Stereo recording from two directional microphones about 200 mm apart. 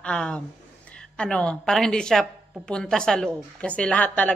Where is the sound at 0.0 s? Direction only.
5° left (ahead or behind).